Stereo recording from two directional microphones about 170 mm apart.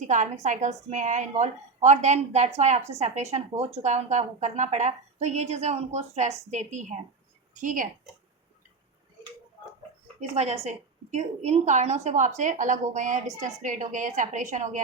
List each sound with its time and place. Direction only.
0.1 s a woman's voice: 50° right (ahead or behind)
10.2 s a woman's voice: 40° right (ahead or behind)